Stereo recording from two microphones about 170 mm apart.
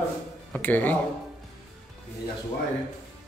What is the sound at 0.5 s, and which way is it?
Speech, 10° left (ahead or behind).